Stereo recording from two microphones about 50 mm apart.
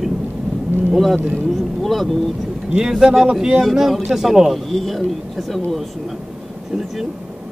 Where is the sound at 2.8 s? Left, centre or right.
Centre.